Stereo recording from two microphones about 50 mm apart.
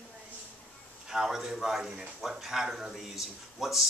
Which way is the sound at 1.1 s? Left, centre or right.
Centre.